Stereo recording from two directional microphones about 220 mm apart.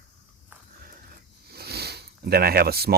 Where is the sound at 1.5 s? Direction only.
45° right (ahead or behind).